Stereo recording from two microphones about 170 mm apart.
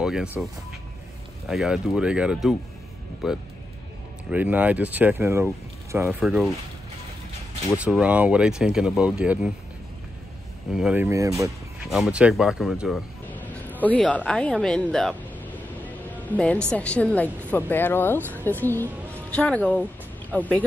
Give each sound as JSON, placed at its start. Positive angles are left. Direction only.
{"t": 0.0, "sound": "speech", "side_deg": -5}
{"t": 1.5, "sound": "speech", "side_deg": 0}
{"t": 6.0, "sound": "speech", "side_deg": -5}
{"t": 7.7, "sound": "speech", "side_deg": -5}
{"t": 10.7, "sound": "speech", "side_deg": -5}
{"t": 11.8, "sound": "speech", "side_deg": 0}
{"t": 13.3, "sound": "speech", "side_deg": 10}